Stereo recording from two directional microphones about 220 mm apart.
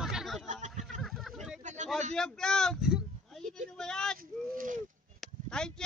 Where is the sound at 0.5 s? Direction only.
30° right (ahead or behind).